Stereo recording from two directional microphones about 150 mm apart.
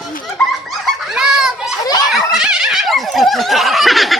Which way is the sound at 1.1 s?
5° right (ahead or behind).